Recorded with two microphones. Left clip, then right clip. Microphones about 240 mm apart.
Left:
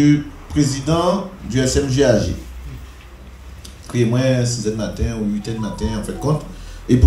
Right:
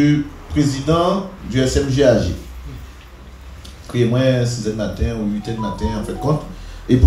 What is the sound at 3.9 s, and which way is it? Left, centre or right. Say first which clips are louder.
Speech: right 1 dB; left.